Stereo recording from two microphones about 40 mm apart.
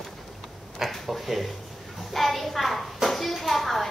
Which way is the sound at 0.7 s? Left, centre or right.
Centre.